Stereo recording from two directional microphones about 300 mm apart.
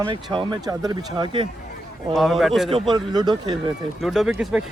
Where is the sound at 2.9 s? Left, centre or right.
Centre.